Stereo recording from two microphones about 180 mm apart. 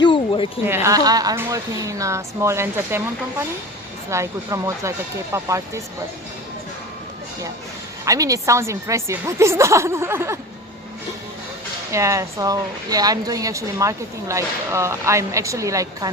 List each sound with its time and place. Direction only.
0.0 s a sound: 30° left (ahead or behind)
0.6 s a woman's voice: 15° right (ahead or behind)
8.0 s a woman's voice: 20° right (ahead or behind)
11.9 s a woman's voice: 15° right (ahead or behind)